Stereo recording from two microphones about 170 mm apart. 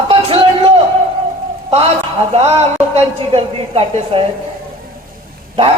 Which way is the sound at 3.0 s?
35° right (ahead or behind).